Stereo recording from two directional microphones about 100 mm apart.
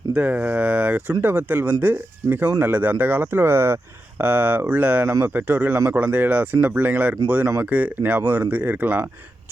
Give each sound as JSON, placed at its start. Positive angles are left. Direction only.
{"t": 0.1, "sound": "speech", "side_deg": -15}